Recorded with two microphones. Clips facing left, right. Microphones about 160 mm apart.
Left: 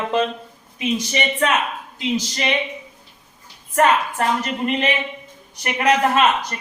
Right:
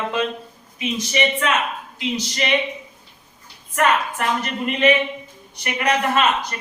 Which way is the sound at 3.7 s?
35° left (ahead or behind).